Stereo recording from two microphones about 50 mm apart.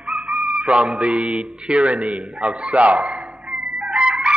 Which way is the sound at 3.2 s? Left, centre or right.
Centre.